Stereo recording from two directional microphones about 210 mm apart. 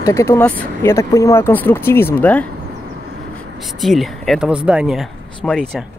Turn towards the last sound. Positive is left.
turn(degrees=0)  # may be behind; listen again after turning